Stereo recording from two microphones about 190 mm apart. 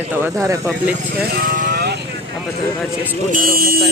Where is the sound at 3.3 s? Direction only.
45° right (ahead or behind).